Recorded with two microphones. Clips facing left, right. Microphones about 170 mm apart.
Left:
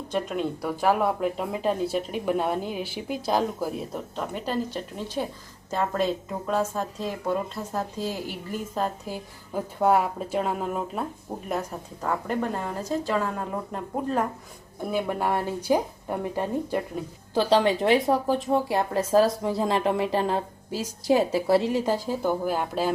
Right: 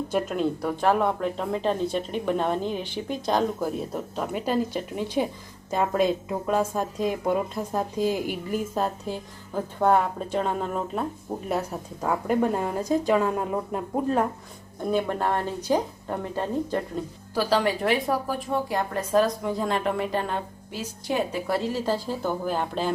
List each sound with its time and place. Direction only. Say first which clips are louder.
0.1 s speech: even; centre (ahead or behind)
9.0 s a woman's voice: right 2 dB; 5° left (ahead or behind)
17.3 s speech: left 2 dB; 25° left (ahead or behind); by 22.9 s 10° left (ahead or behind)